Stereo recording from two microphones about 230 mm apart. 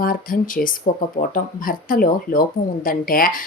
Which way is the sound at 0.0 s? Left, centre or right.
Left.